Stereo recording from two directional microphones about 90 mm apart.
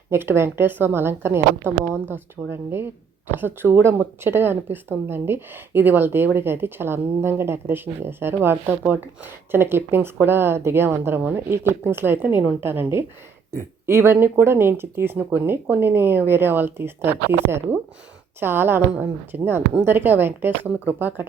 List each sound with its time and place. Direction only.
0.1 s speech: 25° right (ahead or behind)